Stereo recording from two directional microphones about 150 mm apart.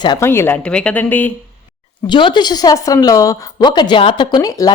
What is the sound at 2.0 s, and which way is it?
A woman's voice, 30° left (ahead or behind).